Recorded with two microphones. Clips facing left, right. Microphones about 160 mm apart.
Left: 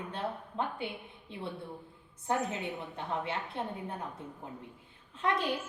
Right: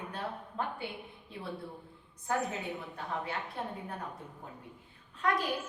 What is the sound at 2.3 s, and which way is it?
A woman's voice, 25° left (ahead or behind).